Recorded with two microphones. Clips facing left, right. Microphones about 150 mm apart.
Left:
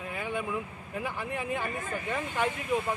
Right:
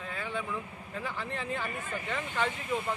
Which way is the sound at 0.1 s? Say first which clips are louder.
Left 3 dB; 15° left (ahead or behind).